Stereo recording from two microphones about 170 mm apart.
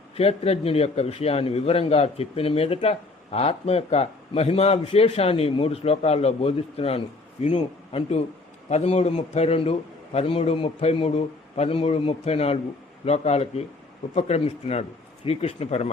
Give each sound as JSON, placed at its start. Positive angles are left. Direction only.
{"t": 0.2, "sound": "a man's voice", "side_deg": 35}